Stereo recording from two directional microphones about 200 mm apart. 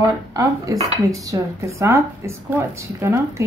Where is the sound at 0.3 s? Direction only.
15° right (ahead or behind).